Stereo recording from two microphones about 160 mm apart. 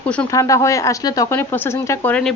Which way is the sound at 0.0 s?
10° left (ahead or behind).